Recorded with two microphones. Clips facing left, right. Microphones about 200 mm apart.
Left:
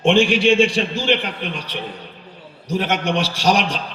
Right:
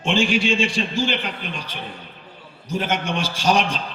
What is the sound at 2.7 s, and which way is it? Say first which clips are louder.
Speech: left 3 dB; 70° left (ahead or behind).